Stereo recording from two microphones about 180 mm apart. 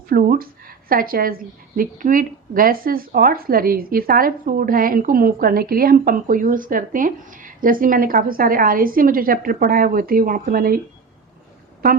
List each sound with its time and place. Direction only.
0.1 s a woman's voice: 55° right (ahead or behind)